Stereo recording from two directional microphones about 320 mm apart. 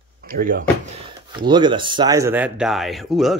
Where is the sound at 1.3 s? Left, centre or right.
Centre.